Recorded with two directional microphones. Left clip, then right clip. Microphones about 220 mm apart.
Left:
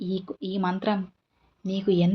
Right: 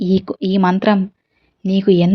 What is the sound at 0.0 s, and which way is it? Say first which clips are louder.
Speech: right 13 dB; 40° right (ahead or behind).